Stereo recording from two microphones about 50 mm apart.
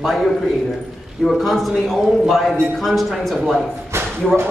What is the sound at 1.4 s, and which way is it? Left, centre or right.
A man's voice, centre.